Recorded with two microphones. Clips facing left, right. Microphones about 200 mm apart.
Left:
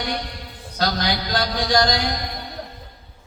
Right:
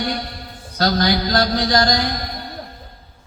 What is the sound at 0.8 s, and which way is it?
A man's voice, 45° right (ahead or behind).